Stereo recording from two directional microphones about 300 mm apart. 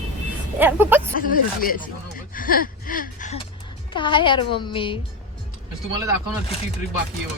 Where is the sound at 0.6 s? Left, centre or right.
Centre.